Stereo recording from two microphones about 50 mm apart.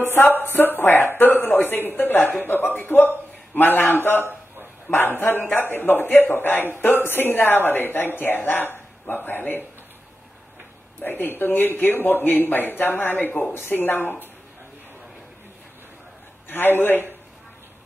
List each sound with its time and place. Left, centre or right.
0.0 s a man's voice: left
11.0 s speech: left
16.4 s a man's voice: left